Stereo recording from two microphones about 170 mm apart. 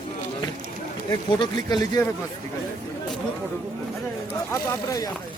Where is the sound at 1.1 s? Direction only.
25° left (ahead or behind).